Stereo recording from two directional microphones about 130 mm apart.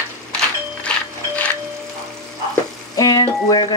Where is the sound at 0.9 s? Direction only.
10° left (ahead or behind).